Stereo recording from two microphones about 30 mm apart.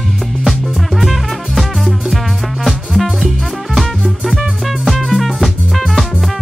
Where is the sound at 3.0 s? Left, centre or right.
Centre.